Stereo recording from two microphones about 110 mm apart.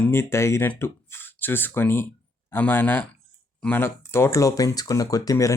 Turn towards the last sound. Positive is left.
turn(degrees=30)  # may be behind; listen again after turning